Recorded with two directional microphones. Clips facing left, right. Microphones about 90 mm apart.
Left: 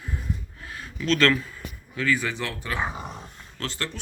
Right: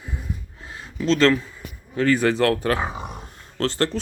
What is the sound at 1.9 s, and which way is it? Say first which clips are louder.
Speech: right 7 dB; 50° right (ahead or behind).